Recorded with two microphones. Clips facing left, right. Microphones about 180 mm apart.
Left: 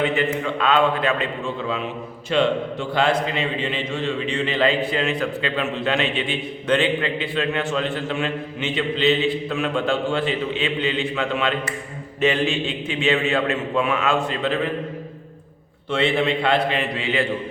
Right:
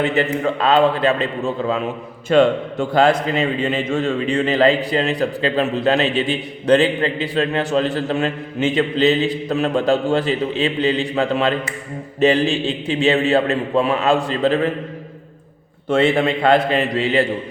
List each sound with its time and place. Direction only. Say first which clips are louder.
0.4 s a man's voice: right 5 dB; 35° right (ahead or behind)
15.9 s a man's voice: right 4 dB; 45° right (ahead or behind)